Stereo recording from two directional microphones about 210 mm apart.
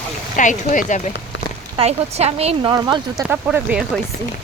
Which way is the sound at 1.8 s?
30° right (ahead or behind).